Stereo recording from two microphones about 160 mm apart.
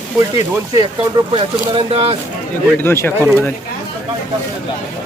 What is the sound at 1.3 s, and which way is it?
Speech, 35° right (ahead or behind).